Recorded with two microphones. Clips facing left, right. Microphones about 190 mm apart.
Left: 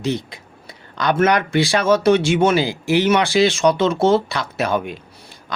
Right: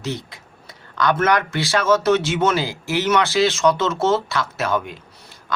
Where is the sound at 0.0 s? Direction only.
15° left (ahead or behind).